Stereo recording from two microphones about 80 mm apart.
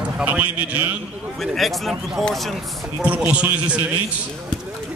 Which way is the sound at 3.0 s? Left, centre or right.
Centre.